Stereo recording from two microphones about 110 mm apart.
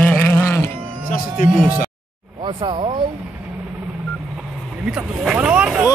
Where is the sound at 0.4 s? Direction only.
25° left (ahead or behind).